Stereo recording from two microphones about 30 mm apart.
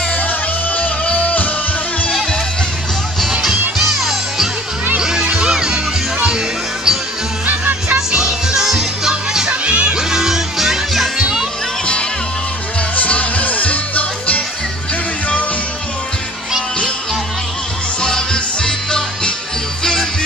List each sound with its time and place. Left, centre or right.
1.1 s music: left
3.7 s music: centre
5.2 s music: right
5.5 s music: right
7.4 s music: right
8.2 s music: centre
9.5 s music: right
9.9 s music: centre
12.9 s music: left
18.0 s music: left